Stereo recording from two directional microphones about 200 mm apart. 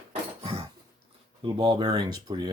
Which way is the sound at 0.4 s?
25° right (ahead or behind).